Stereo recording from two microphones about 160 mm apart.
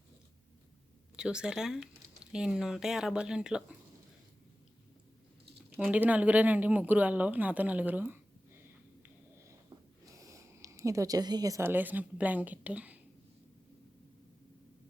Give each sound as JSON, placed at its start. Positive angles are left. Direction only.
{"t": 1.1, "sound": "speech", "side_deg": -5}
{"t": 5.9, "sound": "speech", "side_deg": -10}
{"t": 9.6, "sound": "speech", "side_deg": -20}